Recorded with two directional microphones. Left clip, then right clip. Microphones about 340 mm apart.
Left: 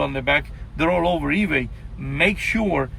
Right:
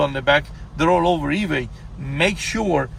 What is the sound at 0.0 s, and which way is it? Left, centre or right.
A man's voice, centre.